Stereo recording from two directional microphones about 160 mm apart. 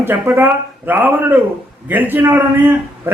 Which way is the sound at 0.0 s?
15° right (ahead or behind).